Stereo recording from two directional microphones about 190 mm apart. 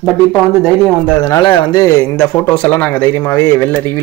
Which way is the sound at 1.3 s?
25° left (ahead or behind).